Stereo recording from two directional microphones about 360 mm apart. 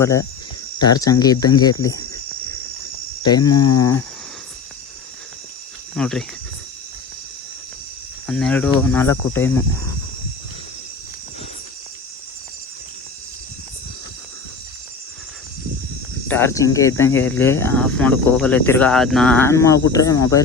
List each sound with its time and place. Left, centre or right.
0.0 s speech: centre
3.2 s speech: centre
3.5 s speech: left
3.8 s speech: centre
6.0 s speech: centre
8.3 s speech: centre
16.3 s speech: centre